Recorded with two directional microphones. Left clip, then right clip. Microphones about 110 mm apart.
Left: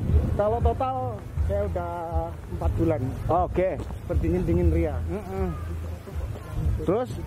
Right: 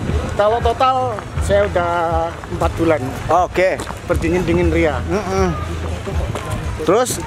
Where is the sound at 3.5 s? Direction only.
10° right (ahead or behind).